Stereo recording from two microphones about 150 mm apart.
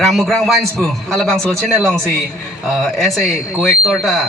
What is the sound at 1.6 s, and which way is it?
Speech, 15° right (ahead or behind).